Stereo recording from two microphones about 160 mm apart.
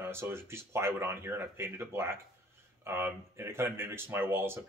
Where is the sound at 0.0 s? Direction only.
15° right (ahead or behind).